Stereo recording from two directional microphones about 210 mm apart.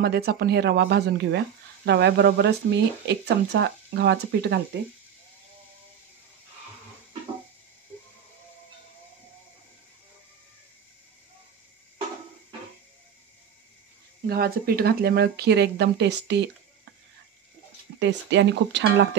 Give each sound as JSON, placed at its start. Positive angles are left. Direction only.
{"t": 0.0, "sound": "speech", "side_deg": -50}
{"t": 14.2, "sound": "speech", "side_deg": -45}
{"t": 17.9, "sound": "speech", "side_deg": -60}